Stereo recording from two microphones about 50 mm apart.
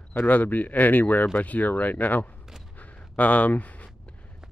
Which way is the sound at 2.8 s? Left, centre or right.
Left.